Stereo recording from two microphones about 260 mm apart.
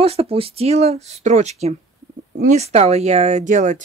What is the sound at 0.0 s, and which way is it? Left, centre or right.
Speech, right.